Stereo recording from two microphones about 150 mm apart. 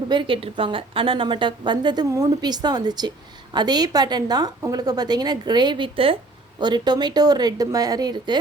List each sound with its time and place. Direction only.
0.1 s a woman's voice: 35° right (ahead or behind)